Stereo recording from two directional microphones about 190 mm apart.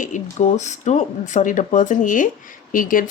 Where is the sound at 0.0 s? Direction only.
40° left (ahead or behind).